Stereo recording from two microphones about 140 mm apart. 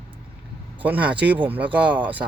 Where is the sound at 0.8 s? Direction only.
10° right (ahead or behind).